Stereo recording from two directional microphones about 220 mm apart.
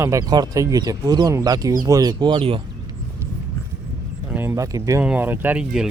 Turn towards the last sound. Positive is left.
turn(degrees=-5)  # may be behind; listen again after turning